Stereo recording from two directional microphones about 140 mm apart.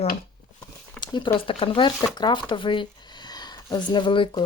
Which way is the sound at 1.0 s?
35° left (ahead or behind).